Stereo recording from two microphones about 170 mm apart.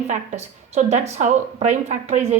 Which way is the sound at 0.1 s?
45° right (ahead or behind).